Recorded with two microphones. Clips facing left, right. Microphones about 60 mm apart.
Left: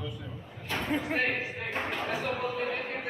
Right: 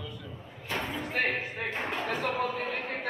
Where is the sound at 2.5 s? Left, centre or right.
Right.